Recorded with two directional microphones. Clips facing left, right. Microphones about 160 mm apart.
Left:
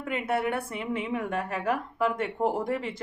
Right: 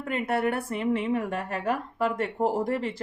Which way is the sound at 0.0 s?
45° right (ahead or behind).